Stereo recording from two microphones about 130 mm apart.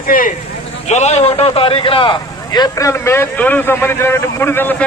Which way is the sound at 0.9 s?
60° left (ahead or behind).